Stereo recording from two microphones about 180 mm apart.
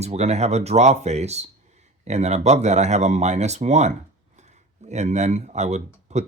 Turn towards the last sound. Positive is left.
turn(degrees=-40)  # may be behind; listen again after turning